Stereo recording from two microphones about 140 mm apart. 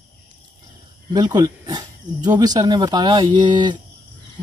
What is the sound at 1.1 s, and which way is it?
Speech, 30° right (ahead or behind).